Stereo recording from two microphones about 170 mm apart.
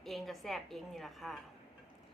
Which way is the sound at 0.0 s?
Centre (ahead or behind).